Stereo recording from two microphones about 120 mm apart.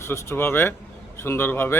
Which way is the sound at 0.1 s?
20° left (ahead or behind).